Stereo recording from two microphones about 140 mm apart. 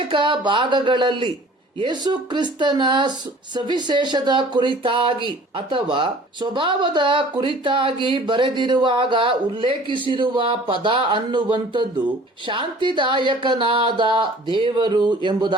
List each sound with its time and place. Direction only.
0.1 s speech: 35° right (ahead or behind)